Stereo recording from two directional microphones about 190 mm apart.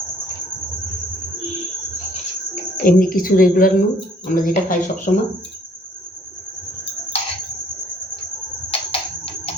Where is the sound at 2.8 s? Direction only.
50° left (ahead or behind).